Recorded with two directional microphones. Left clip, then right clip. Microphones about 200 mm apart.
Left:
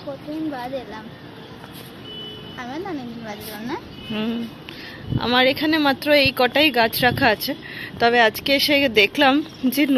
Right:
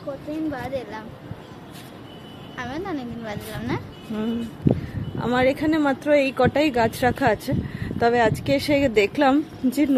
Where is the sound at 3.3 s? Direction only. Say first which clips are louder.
Right 1 dB; 35° right (ahead or behind).